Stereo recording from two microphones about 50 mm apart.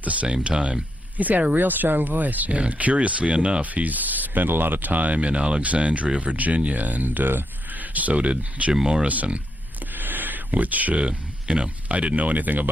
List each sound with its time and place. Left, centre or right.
0.0 s speech: right
8.7 s speech: centre
9.0 s speech: right